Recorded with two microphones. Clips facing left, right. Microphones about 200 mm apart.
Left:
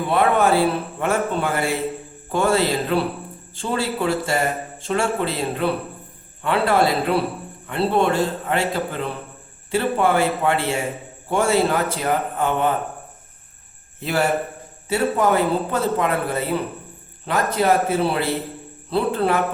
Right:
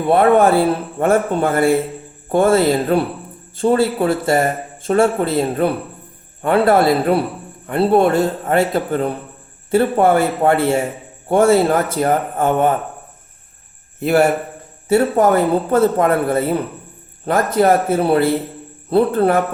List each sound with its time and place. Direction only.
0.1 s a man's voice: 50° right (ahead or behind)
14.0 s a man's voice: 55° right (ahead or behind)